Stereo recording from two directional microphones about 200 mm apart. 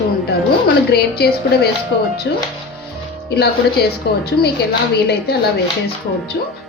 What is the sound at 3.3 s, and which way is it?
Speech, 55° left (ahead or behind).